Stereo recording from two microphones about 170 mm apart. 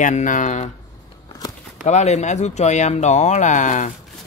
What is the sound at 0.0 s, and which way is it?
Speech, 50° left (ahead or behind).